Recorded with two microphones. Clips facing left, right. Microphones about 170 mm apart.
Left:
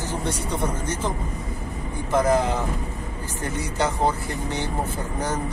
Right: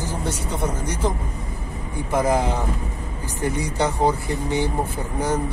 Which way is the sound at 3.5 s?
10° right (ahead or behind).